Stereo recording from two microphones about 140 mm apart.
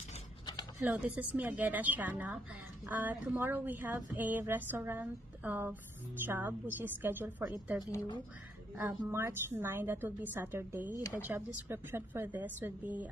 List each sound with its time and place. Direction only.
0.7 s speech: 10° right (ahead or behind)
8.7 s speech: 15° right (ahead or behind)